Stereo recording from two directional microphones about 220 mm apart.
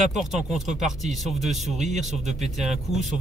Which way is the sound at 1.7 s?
30° right (ahead or behind).